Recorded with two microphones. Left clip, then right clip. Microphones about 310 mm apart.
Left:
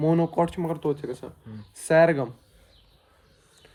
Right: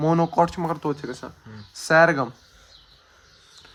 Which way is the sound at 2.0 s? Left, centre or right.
Centre.